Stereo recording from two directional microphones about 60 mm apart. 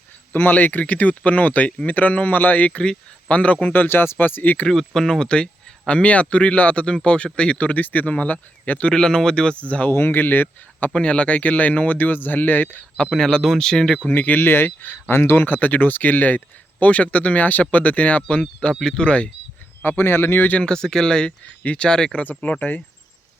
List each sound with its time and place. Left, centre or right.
0.3 s speech: left
4.7 s speech: centre; by 8.9 s left
8.9 s speech: centre
9.9 s speech: left
10.9 s speech: centre
13.1 s speech: centre
14.1 s speech: left
19.8 s speech: left
20.6 s speech: centre
21.6 s speech: left
21.8 s speech: centre
22.2 s speech: left